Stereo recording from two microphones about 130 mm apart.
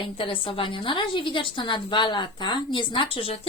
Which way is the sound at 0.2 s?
40° left (ahead or behind).